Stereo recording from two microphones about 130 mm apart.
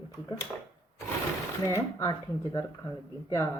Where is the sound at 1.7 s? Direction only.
20° left (ahead or behind).